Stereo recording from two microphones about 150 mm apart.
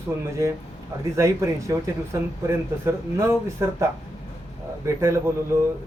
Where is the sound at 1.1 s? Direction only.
20° right (ahead or behind).